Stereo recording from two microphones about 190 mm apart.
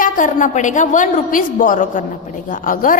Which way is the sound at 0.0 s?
45° left (ahead or behind).